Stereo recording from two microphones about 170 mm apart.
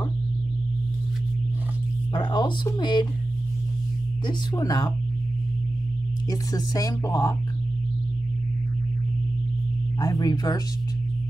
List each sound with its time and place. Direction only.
2.1 s speech: 25° left (ahead or behind)
4.3 s speech: 25° left (ahead or behind)
6.3 s speech: 20° left (ahead or behind)
9.9 s speech: 20° left (ahead or behind)